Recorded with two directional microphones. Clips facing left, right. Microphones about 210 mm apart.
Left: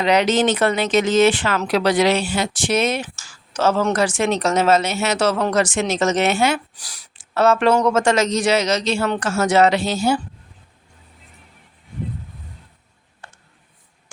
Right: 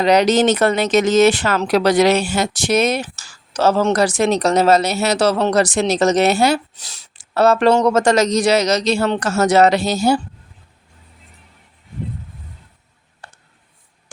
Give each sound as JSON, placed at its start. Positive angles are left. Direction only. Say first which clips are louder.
{"t": 0.0, "sound": "speech", "louder": "right 3 dB", "side_deg": -40}
{"t": 6.7, "sound": "speech", "louder": "right 1 dB", "side_deg": -25}
{"t": 7.1, "sound": "speech", "louder": "right 2 dB", "side_deg": -35}
{"t": 13.2, "sound": "a sound", "louder": "right 1 dB", "side_deg": -35}